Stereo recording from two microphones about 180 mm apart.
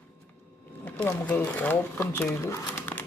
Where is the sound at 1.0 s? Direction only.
10° left (ahead or behind).